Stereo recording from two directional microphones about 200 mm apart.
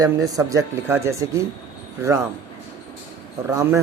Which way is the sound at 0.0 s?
20° right (ahead or behind).